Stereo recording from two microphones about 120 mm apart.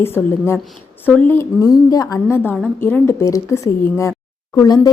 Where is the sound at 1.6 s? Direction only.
30° left (ahead or behind).